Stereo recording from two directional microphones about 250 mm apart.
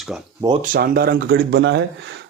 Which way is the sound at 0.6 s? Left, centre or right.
Right.